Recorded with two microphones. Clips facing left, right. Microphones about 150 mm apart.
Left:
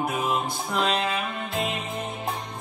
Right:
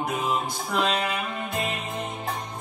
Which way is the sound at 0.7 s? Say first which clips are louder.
Even; centre (ahead or behind).